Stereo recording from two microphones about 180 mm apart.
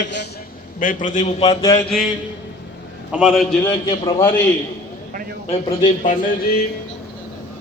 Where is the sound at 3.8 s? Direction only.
20° left (ahead or behind).